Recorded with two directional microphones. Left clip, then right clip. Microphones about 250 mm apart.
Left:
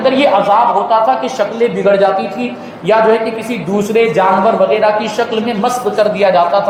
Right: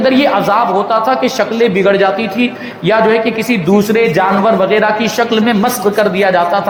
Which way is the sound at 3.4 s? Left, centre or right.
Right.